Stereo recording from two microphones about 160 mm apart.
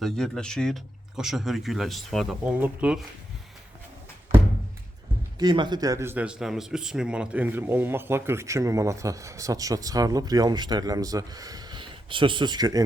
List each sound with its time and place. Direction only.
0.0 s speech: 5° left (ahead or behind)
5.4 s speech: 30° right (ahead or behind)